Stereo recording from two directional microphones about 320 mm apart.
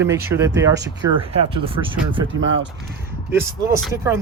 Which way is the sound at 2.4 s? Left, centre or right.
Right.